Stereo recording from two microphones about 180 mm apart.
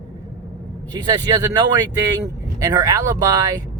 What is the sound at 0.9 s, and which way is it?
Speech, 25° right (ahead or behind).